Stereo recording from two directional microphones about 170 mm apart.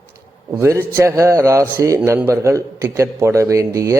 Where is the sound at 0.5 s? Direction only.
15° right (ahead or behind).